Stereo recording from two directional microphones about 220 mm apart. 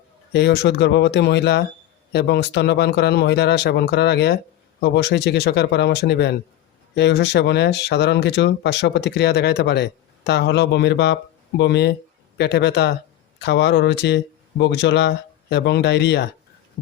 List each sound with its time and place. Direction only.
0.3 s speech: 50° left (ahead or behind)